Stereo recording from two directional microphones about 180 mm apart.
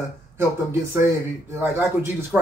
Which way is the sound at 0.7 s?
15° right (ahead or behind).